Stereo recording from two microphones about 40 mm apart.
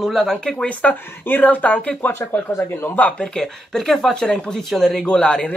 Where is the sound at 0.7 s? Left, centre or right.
Left.